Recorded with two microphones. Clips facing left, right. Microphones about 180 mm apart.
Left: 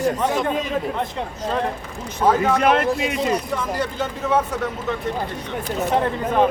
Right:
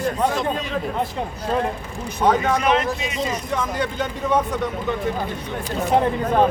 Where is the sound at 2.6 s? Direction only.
55° left (ahead or behind).